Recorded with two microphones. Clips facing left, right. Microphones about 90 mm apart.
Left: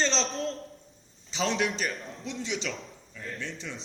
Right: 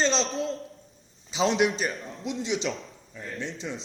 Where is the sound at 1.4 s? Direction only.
30° right (ahead or behind).